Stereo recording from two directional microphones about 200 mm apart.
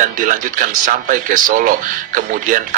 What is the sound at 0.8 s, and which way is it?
Speech, 40° right (ahead or behind).